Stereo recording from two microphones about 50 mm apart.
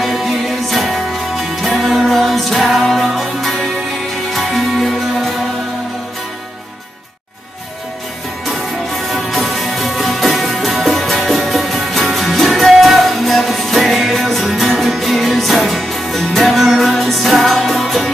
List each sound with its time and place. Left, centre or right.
0.0 s music: centre
8.5 s music: centre